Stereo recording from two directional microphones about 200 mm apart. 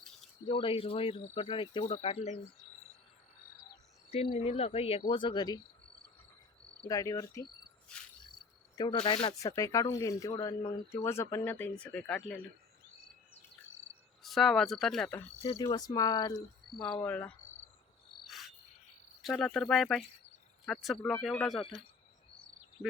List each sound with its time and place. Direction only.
0.4 s cricket: 25° left (ahead or behind)
4.1 s cricket: 30° left (ahead or behind)
6.8 s speech: 15° left (ahead or behind)
8.8 s cricket: 25° left (ahead or behind)
9.6 s speech: 15° left (ahead or behind)
14.2 s speech: centre (ahead or behind)
15.4 s cricket: 25° left (ahead or behind)
16.8 s speech: 5° left (ahead or behind)
18.3 s insect: centre (ahead or behind)
19.2 s speech: centre (ahead or behind)
22.8 s speech: 20° left (ahead or behind)